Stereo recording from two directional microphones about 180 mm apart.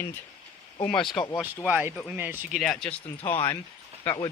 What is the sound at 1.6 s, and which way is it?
Speech, 10° right (ahead or behind).